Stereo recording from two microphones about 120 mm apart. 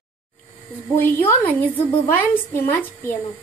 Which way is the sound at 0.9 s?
15° left (ahead or behind).